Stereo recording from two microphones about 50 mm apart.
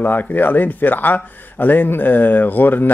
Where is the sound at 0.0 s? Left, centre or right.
Left.